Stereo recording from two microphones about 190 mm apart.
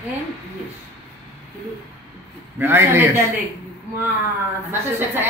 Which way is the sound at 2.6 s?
10° right (ahead or behind).